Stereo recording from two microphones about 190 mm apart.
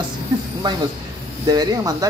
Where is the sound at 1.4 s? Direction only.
20° right (ahead or behind).